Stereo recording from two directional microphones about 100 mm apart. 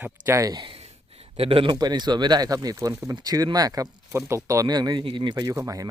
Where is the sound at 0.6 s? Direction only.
70° right (ahead or behind).